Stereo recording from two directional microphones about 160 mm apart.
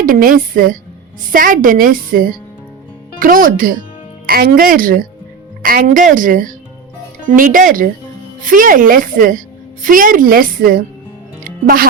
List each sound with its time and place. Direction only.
0.0 s a woman's voice: 60° right (ahead or behind)
11.4 s music: 65° right (ahead or behind)